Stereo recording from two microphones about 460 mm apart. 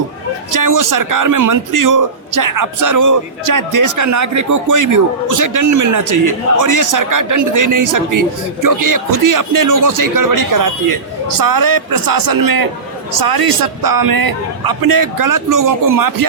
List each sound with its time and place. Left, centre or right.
0.5 s a man's voice: right